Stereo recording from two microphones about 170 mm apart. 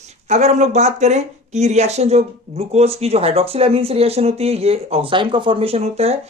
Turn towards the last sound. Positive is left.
turn(degrees=-40)  # may be behind; listen again after turning